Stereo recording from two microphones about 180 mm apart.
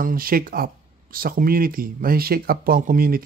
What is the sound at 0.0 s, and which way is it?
Speech, 50° right (ahead or behind).